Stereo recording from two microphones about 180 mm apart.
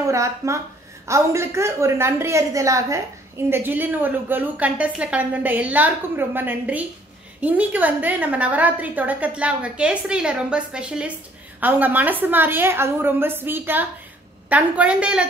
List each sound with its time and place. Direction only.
0.0 s a woman's voice: 15° right (ahead or behind)